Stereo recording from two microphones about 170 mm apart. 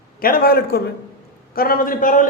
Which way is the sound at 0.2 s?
60° left (ahead or behind).